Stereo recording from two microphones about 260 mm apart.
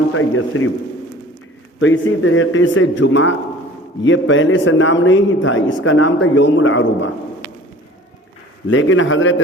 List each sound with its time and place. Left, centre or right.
0.1 s a man's voice: left
1.8 s a man's voice: left
8.7 s a man's voice: left